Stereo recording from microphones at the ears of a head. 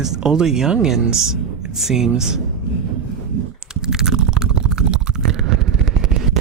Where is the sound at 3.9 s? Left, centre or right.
Right.